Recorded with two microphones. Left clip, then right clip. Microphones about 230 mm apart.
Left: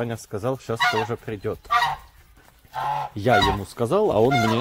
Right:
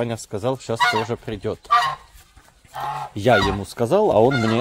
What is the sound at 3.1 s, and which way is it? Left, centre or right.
Speech, right.